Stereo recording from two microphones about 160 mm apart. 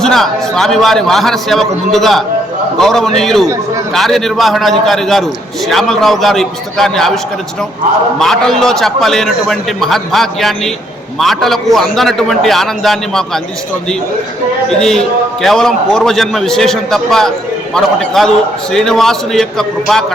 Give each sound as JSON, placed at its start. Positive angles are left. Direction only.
{"t": 0.0, "sound": "a man's voice", "side_deg": 0}
{"t": 8.2, "sound": "a man's voice", "side_deg": 0}
{"t": 14.7, "sound": "a man's voice", "side_deg": 5}